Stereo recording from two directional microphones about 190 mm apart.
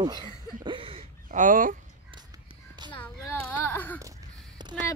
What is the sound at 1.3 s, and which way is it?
Speech, 45° right (ahead or behind).